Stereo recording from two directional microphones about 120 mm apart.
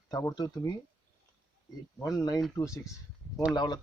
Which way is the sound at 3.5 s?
35° left (ahead or behind).